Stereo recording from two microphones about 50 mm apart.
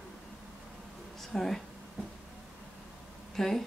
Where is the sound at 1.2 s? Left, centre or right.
Centre.